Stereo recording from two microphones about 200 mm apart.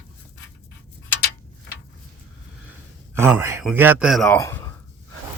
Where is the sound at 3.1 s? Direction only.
10° right (ahead or behind).